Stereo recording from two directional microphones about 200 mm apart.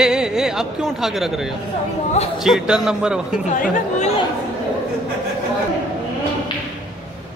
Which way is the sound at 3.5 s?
35° left (ahead or behind).